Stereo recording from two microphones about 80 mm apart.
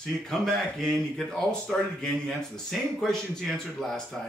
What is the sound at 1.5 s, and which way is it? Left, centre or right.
Speech, centre.